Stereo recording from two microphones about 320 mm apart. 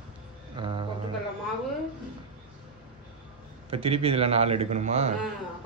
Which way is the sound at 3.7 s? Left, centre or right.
Centre.